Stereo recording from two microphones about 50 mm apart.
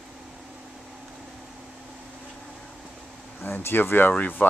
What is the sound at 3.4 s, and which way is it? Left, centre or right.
Speech, left.